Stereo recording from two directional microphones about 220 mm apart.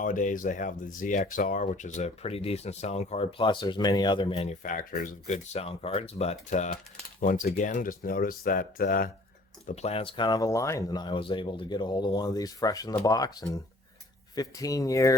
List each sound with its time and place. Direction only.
0.0 s speech: 35° left (ahead or behind); by 15.1 s 15° left (ahead or behind)